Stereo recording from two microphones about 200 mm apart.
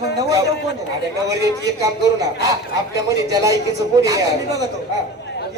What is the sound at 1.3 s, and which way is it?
Speech, 15° right (ahead or behind).